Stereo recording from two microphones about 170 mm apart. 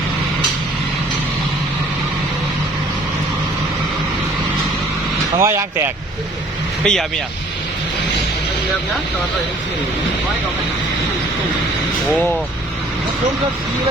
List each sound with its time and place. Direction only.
5.4 s speech: 15° right (ahead or behind)
6.8 s speech: 5° left (ahead or behind)